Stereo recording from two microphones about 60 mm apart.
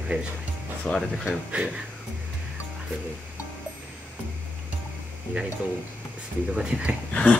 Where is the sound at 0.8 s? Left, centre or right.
Centre.